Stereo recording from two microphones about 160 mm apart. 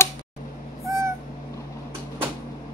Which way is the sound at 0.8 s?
20° right (ahead or behind).